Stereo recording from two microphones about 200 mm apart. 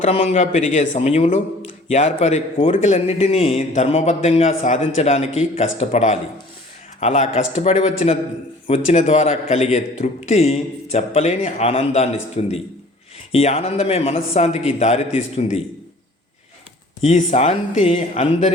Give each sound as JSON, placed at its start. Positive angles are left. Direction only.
{"t": 0.0, "sound": "a man's voice", "side_deg": 30}
{"t": 17.0, "sound": "a man's voice", "side_deg": 35}